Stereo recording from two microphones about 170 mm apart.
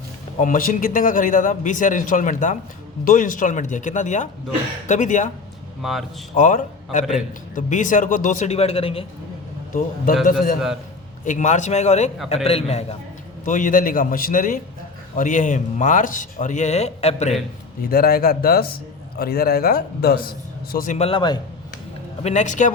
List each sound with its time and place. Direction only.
0.3 s speech: 50° left (ahead or behind)
5.8 s a man's voice: centre (ahead or behind)
6.3 s speech: 50° left (ahead or behind)
11.3 s a man's voice: 45° left (ahead or behind)
13.4 s speech: 50° left (ahead or behind)
17.9 s a man's voice: 60° left (ahead or behind)
20.7 s speech: 45° left (ahead or behind)
21.1 s a man's voice: 25° left (ahead or behind)
22.2 s speech: 40° left (ahead or behind)